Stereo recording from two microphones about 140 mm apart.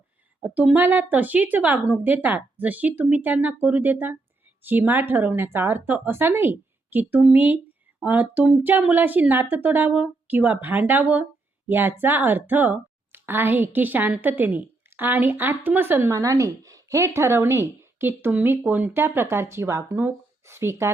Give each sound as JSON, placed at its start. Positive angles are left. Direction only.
{"t": 0.4, "sound": "a woman's voice", "side_deg": -10}